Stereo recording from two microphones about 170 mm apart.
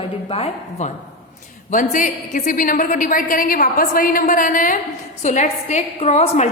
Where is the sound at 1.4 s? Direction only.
50° left (ahead or behind).